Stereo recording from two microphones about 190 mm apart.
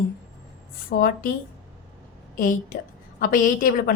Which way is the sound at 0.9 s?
50° left (ahead or behind).